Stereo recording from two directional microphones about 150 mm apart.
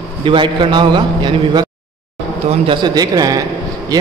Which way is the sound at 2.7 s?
30° right (ahead or behind).